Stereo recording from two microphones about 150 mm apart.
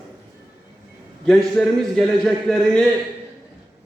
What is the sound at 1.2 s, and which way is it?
A man's voice, 5° left (ahead or behind).